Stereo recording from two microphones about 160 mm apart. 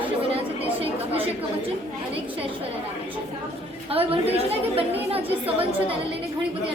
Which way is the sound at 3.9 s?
35° right (ahead or behind).